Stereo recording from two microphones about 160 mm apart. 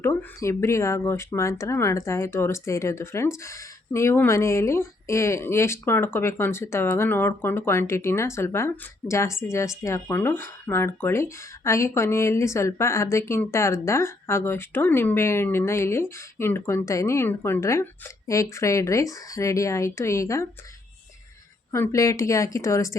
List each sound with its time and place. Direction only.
0.0 s speech: 15° left (ahead or behind)
21.7 s a woman's voice: 20° left (ahead or behind)